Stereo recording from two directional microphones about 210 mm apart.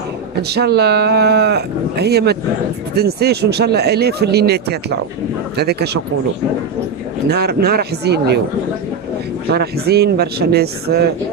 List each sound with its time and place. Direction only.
0.4 s speech: 50° right (ahead or behind)
7.2 s speech: 50° right (ahead or behind)
9.5 s speech: 50° right (ahead or behind)